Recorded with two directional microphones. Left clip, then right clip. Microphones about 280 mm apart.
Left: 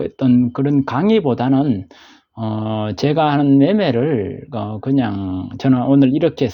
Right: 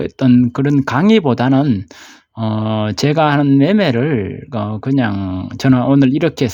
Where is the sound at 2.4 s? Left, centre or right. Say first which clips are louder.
Right 3 dB; right.